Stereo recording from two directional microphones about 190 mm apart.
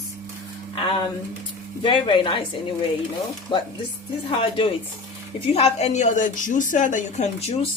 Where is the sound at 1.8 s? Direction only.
25° left (ahead or behind).